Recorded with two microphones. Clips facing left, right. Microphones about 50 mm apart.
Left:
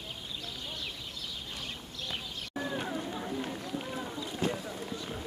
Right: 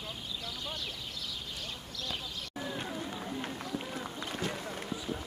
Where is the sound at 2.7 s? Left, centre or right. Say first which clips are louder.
Left 3 dB; centre.